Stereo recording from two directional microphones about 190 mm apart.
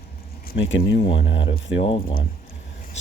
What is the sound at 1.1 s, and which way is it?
Speech, 75° left (ahead or behind).